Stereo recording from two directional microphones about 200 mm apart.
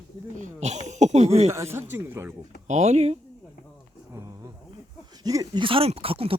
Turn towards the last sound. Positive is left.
turn(degrees=-25)  # may be behind; listen again after turning